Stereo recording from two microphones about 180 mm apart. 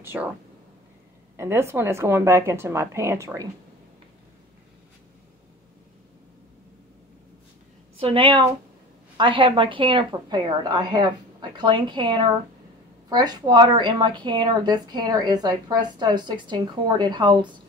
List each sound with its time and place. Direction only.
0.0 s speech: 10° right (ahead or behind)
1.3 s a woman's voice: 15° right (ahead or behind)
8.0 s a woman's voice: 30° right (ahead or behind)